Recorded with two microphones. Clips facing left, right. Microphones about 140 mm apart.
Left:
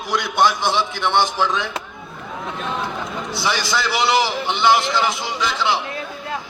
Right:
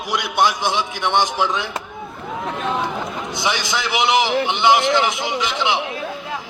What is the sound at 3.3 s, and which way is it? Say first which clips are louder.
A man's voice: left 1 dB; 20° right (ahead or behind).